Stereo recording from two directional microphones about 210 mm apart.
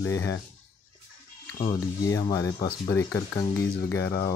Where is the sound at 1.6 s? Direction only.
20° left (ahead or behind).